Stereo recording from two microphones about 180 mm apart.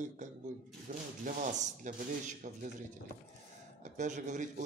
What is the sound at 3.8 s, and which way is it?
Speech, 45° right (ahead or behind).